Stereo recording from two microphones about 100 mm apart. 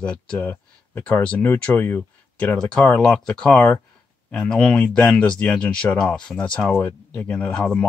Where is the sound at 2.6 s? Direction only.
5° left (ahead or behind).